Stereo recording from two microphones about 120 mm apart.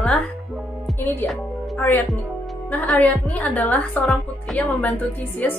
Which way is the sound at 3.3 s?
10° left (ahead or behind).